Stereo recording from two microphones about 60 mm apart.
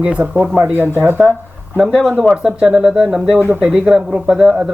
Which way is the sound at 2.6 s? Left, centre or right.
Centre.